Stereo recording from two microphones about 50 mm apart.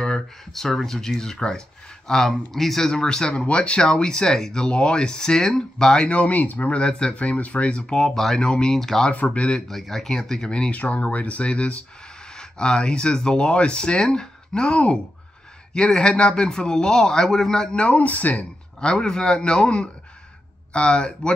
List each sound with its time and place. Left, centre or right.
0.0 s speech: centre
6.1 s speech: left
6.7 s speech: centre
7.8 s speech: centre
8.5 s speech: centre
8.7 s speech: centre
9.1 s speech: left
9.7 s speech: centre; by 11.8 s left
12.3 s speech: centre
17.7 s speech: left
18.8 s speech: centre